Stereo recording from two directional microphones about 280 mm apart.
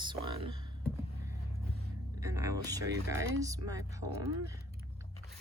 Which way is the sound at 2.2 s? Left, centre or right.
Centre.